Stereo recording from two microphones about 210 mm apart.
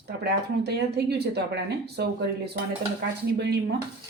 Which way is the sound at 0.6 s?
50° right (ahead or behind).